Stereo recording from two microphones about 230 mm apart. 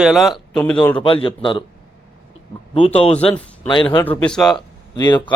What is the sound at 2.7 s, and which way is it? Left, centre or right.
Speech, left.